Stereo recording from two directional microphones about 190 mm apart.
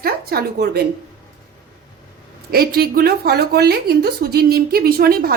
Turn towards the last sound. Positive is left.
turn(degrees=-50)  # may be behind; listen again after turning